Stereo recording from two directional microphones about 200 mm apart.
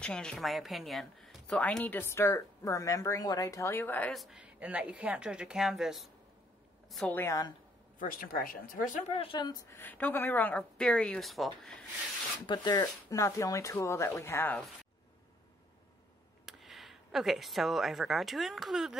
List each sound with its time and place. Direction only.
0.0 s a woman's voice: 5° left (ahead or behind)
8.0 s speech: 45° left (ahead or behind)
9.1 s a woman's voice: 25° left (ahead or behind); by 11.8 s centre (ahead or behind)
12.4 s a woman's voice: 20° left (ahead or behind)
16.4 s speech: centre (ahead or behind)